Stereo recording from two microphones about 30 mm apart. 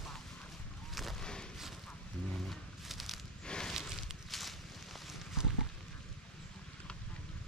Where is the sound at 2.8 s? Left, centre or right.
Centre.